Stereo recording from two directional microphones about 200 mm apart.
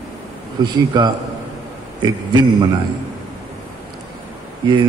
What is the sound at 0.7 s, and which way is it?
Speech, 20° right (ahead or behind).